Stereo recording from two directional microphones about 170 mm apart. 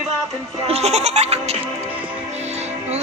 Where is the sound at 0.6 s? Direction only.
40° right (ahead or behind).